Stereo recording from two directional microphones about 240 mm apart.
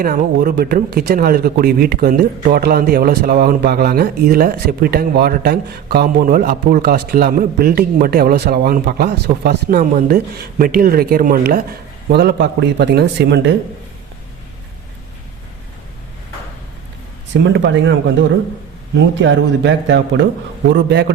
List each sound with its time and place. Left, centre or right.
0.0 s speech: right
17.3 s speech: right